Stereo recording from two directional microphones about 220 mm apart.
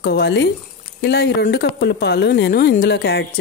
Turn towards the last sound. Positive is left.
turn(degrees=50)  # may be behind; listen again after turning